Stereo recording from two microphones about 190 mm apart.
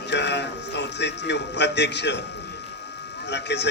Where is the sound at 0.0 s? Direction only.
65° left (ahead or behind).